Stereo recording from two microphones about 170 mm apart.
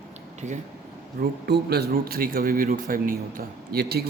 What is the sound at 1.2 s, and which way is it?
A man's voice, 60° right (ahead or behind).